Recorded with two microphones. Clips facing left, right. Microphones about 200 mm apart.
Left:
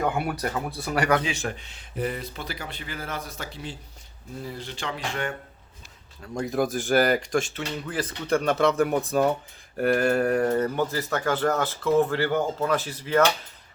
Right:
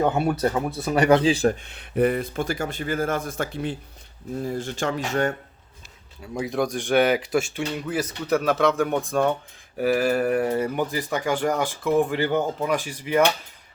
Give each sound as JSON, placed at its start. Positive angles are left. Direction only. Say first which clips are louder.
{"t": 0.0, "sound": "speech", "louder": "right 5 dB", "side_deg": -25}
{"t": 1.6, "sound": "speech", "louder": "right 9 dB", "side_deg": -60}
{"t": 6.3, "sound": "speech", "louder": "even", "side_deg": 0}